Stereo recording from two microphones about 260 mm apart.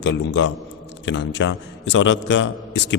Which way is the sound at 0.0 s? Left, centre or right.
Left.